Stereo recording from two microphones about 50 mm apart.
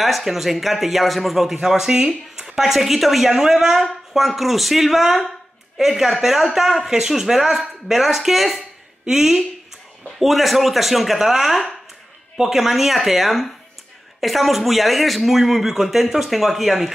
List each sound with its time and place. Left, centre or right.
0.0 s a woman's voice: centre